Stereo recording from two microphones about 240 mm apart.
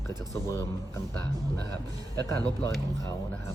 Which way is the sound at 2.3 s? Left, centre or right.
Centre.